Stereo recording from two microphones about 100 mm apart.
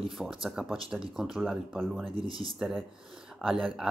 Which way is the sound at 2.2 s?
60° right (ahead or behind).